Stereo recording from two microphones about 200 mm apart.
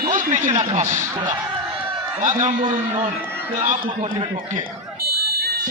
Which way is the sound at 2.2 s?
35° right (ahead or behind).